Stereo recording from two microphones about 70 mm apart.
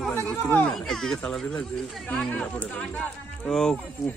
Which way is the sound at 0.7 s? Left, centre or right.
Centre.